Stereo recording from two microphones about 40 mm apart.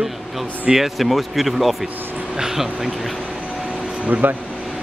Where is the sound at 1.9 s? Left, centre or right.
Right.